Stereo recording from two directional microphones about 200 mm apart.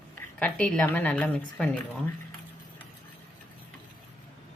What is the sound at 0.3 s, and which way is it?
Speech, 5° left (ahead or behind).